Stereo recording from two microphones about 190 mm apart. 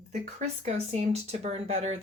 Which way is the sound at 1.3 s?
35° right (ahead or behind).